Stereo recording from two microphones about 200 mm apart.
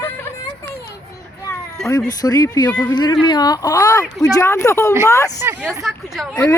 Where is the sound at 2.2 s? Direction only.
15° left (ahead or behind).